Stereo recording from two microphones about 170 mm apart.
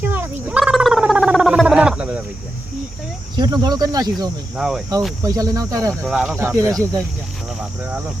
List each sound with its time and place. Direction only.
0.0 s gargling: 15° right (ahead or behind)
0.6 s gargling: centre (ahead or behind)
3.3 s speech: 25° right (ahead or behind)
4.5 s speech: 5° right (ahead or behind)
5.2 s speech: 20° right (ahead or behind)
5.9 s speech: 5° left (ahead or behind)
6.3 s speech: 15° right (ahead or behind)